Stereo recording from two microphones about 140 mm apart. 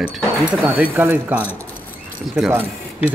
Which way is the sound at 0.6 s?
15° right (ahead or behind).